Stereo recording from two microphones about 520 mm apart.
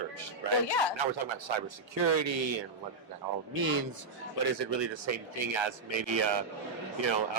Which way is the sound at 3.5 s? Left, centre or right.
Right.